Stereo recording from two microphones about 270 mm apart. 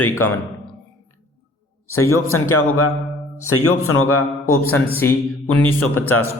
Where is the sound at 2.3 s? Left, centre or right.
Left.